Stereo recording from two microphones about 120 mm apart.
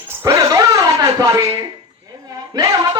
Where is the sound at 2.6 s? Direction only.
35° right (ahead or behind).